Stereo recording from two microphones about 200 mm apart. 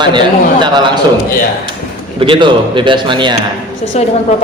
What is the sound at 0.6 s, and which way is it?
Mantra, 20° right (ahead or behind).